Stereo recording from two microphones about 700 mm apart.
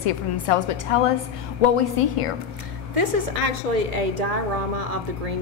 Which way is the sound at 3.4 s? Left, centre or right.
Right.